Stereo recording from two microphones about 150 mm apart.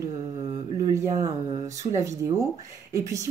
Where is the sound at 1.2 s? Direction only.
25° right (ahead or behind).